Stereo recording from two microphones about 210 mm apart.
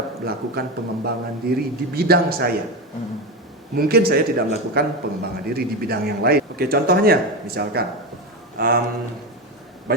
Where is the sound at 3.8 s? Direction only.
45° right (ahead or behind).